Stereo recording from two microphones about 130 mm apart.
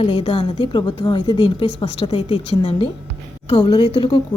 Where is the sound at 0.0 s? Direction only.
45° left (ahead or behind).